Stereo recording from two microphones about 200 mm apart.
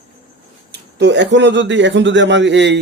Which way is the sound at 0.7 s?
60° right (ahead or behind).